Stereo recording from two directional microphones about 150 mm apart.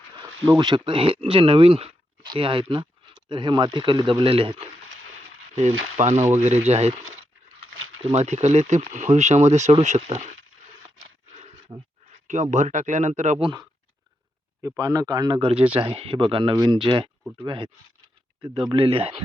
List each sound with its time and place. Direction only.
0.4 s speech: 25° right (ahead or behind)
5.5 s speech: 50° right (ahead or behind)
8.1 s speech: 50° right (ahead or behind)
11.7 s speech: 30° right (ahead or behind)
12.3 s speech: 55° right (ahead or behind)
13.4 s speech: 25° right (ahead or behind)